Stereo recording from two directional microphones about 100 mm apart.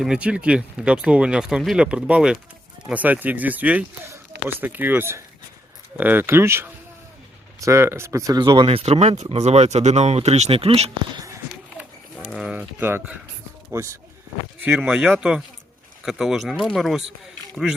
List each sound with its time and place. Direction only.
0.0 s speech: 10° right (ahead or behind); by 8.4 s 30° right (ahead or behind)
8.4 s speech: 50° right (ahead or behind); by 10.9 s 85° right
12.2 s a sound: 5° right (ahead or behind)
12.5 s speech: 20° right (ahead or behind)
14.6 s speech: 15° right (ahead or behind)